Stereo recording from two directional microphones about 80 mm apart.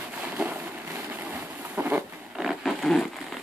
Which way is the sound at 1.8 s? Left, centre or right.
Right.